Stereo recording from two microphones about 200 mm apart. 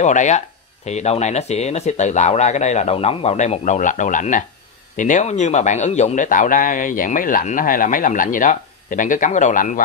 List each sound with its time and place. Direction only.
0.0 s a man's voice: 35° left (ahead or behind)